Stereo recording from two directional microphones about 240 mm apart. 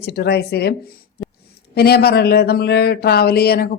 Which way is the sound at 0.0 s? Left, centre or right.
Left.